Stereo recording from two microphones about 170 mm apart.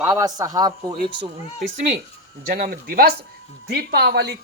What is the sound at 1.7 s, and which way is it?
Speech, 45° right (ahead or behind).